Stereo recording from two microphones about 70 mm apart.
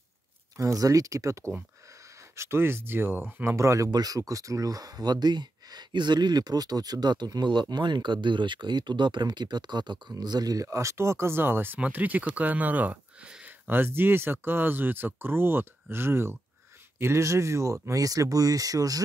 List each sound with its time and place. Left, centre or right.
0.6 s speech: right
3.4 s speech: right
3.9 s speech: right